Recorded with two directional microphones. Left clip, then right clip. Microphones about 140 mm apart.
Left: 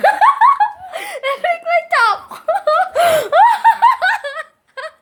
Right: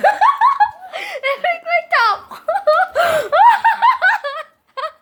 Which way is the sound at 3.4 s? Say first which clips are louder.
Right 1 dB; 20° left (ahead or behind).